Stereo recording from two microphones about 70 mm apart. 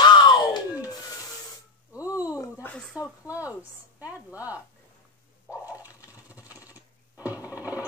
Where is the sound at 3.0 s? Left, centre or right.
Right.